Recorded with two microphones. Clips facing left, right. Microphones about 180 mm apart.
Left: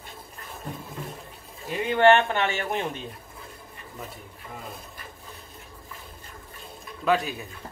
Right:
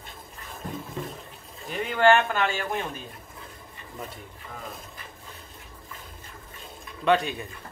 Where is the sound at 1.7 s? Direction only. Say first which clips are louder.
Left 4 dB; centre (ahead or behind).